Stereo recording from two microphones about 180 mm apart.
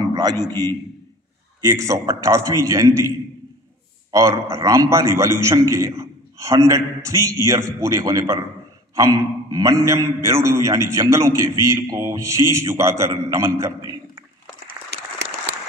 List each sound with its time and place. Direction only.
0.0 s a sound: 25° right (ahead or behind)
1.6 s a man's voice: 20° right (ahead or behind)
4.1 s a man's voice: 15° right (ahead or behind)
14.9 s applause: 70° right (ahead or behind)